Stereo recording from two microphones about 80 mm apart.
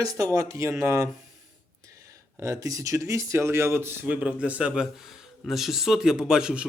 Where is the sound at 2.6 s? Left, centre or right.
Right.